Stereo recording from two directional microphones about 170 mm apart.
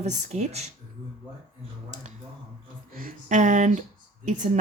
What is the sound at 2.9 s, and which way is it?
Speech, 55° right (ahead or behind).